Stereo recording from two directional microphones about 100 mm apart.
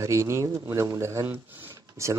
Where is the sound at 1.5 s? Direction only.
20° right (ahead or behind).